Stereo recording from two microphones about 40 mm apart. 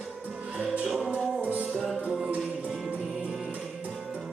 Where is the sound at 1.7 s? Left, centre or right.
Centre.